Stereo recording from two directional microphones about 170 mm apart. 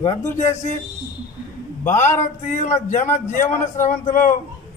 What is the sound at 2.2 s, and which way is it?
Speech, 45° left (ahead or behind).